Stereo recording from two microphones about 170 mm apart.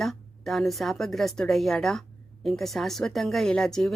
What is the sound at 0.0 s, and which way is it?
A woman's voice, centre (ahead or behind).